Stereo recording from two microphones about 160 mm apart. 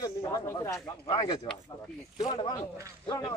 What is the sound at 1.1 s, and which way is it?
Speech, 35° left (ahead or behind).